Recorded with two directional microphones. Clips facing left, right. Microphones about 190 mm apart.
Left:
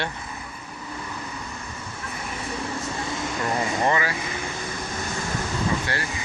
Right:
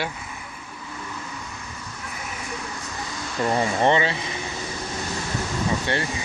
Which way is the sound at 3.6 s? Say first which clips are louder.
Right 4 dB; 25° right (ahead or behind).